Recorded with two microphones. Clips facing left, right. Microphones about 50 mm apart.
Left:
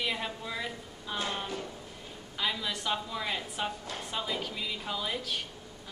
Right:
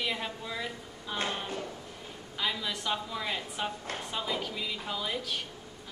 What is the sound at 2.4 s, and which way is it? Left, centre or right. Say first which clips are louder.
A woman's voice: even; centre.